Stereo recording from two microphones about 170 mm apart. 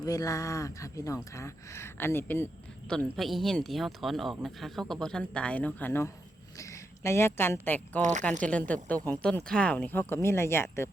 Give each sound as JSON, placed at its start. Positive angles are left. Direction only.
{"t": 0.0, "sound": "speech", "side_deg": 20}
{"t": 2.9, "sound": "speech", "side_deg": 0}